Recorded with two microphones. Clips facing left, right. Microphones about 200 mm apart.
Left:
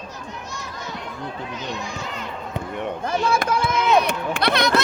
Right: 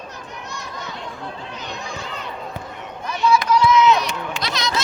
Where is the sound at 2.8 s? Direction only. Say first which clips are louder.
Even; 55° left (ahead or behind).